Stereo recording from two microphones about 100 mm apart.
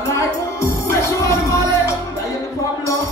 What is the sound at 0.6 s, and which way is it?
Music, 30° left (ahead or behind).